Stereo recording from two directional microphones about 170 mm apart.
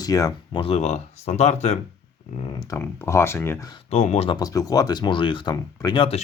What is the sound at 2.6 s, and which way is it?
Speech, 15° left (ahead or behind).